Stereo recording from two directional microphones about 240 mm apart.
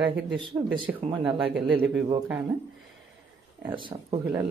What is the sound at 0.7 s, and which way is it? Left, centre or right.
Speech, right.